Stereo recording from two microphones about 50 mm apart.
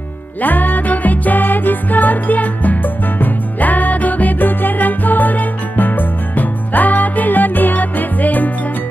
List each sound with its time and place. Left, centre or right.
0.4 s music: left